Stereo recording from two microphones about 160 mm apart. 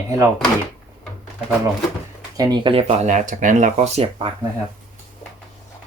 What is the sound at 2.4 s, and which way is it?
Speech, 30° right (ahead or behind).